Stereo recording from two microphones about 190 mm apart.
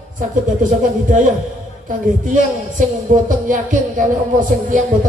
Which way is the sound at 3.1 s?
45° right (ahead or behind).